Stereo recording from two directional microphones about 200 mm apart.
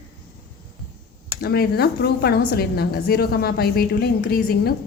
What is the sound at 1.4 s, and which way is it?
A woman's voice, 50° left (ahead or behind).